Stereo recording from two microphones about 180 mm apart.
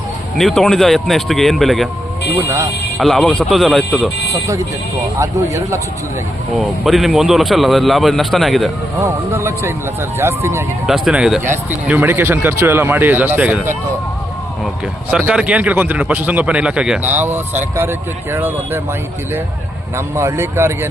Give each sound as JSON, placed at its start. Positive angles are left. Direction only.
{"t": 0.3, "sound": "speech", "side_deg": 0}
{"t": 2.4, "sound": "speech", "side_deg": -15}
{"t": 3.0, "sound": "speech", "side_deg": 0}
{"t": 5.2, "sound": "speech", "side_deg": -15}
{"t": 6.6, "sound": "speech", "side_deg": 0}
{"t": 9.0, "sound": "speech", "side_deg": -15}
{"t": 10.8, "sound": "speech", "side_deg": -5}
{"t": 15.1, "sound": "speech", "side_deg": -5}
{"t": 20.1, "sound": "speech", "side_deg": -15}